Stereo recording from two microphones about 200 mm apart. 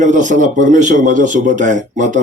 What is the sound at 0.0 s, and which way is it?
Speech, 40° right (ahead or behind).